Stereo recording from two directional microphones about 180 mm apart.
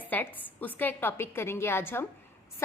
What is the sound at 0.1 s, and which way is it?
A woman's voice, 10° left (ahead or behind).